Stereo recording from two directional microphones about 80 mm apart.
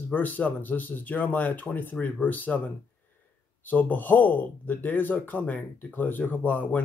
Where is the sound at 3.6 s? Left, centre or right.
Left.